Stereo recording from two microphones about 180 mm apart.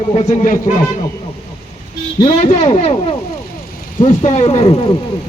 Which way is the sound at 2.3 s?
35° left (ahead or behind).